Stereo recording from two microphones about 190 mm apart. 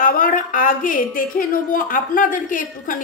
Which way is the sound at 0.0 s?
45° left (ahead or behind).